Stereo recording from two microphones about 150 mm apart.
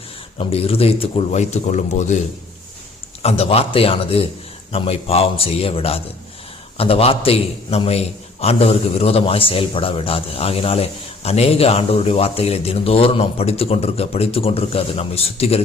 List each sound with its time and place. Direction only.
0.3 s a man's voice: 40° left (ahead or behind)
3.2 s a man's voice: 40° left (ahead or behind)